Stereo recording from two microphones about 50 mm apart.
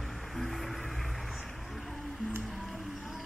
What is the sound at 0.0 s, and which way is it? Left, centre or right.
Music, centre.